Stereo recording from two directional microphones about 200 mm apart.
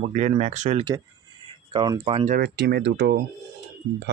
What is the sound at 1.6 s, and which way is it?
Speech, 25° right (ahead or behind).